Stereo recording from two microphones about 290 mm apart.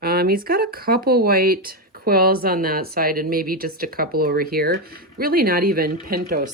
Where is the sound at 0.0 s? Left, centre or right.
Right.